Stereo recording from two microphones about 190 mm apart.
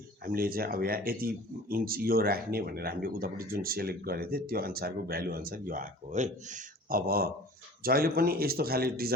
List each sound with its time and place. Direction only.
0.3 s speech: 50° right (ahead or behind)